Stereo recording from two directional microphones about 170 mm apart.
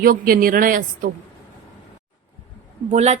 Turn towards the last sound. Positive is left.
turn(degrees=-40)  # may be behind; listen again after turning